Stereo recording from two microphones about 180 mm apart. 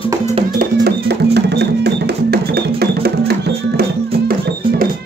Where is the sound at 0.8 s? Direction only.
65° right (ahead or behind).